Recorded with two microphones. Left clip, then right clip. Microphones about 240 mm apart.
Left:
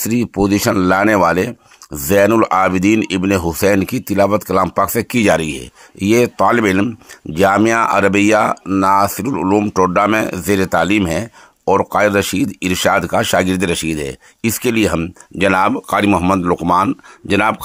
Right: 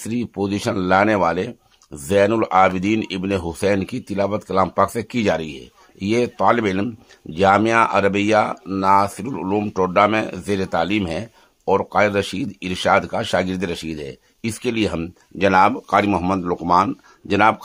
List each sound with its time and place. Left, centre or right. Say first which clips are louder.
0.0 s speech: left 8 dB; left